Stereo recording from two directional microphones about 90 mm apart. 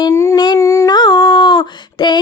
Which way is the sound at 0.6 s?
30° left (ahead or behind).